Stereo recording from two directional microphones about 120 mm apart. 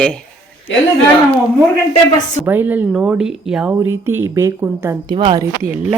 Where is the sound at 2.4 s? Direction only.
15° right (ahead or behind).